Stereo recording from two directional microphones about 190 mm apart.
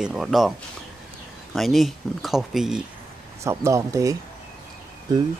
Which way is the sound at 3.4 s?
15° right (ahead or behind).